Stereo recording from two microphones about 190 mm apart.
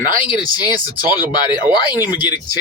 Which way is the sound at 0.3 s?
20° left (ahead or behind).